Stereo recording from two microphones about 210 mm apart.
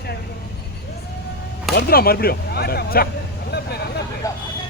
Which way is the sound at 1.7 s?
45° left (ahead or behind).